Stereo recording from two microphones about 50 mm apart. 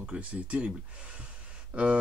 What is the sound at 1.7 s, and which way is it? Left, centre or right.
Speech, right.